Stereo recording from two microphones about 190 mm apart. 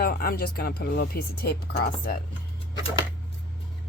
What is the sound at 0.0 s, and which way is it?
Speech, 50° left (ahead or behind).